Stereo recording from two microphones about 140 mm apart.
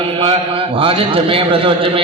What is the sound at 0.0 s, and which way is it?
A man's voice, 40° right (ahead or behind).